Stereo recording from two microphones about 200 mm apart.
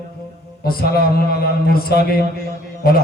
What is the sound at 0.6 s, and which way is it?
Music, 50° left (ahead or behind).